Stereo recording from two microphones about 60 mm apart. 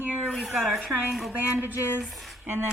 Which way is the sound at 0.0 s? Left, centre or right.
Right.